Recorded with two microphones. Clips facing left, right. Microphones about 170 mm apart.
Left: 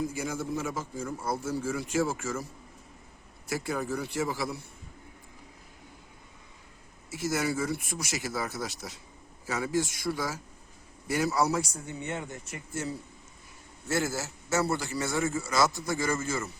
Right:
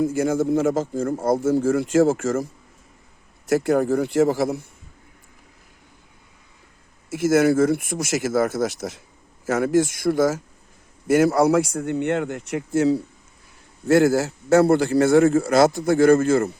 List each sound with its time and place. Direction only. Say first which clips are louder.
0.0 s speech: right 12 dB; 55° right (ahead or behind)
3.5 s speech: right 13 dB; 50° right (ahead or behind)
7.3 s a man's voice: right 13 dB; 75° right (ahead or behind); by 8.6 s 50° right (ahead or behind)
9.6 s speech: right 10 dB; 55° right (ahead or behind)
11.3 s speech: right 10 dB; 65° right (ahead or behind); by 13.0 s 90° right
13.8 s a man's voice: right 14 dB; 60° right (ahead or behind)